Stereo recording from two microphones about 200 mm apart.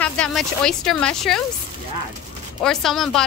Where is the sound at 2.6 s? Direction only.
Centre (ahead or behind).